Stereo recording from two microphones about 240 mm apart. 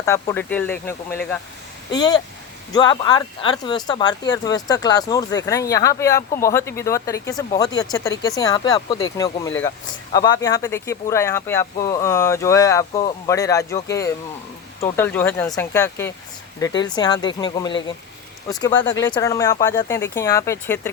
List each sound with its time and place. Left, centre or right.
0.0 s speech: centre